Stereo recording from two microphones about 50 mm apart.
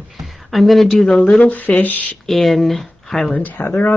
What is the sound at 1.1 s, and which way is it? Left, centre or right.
Speech, left.